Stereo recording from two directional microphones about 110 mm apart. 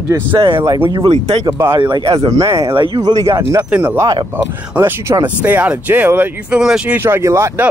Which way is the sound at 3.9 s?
35° right (ahead or behind).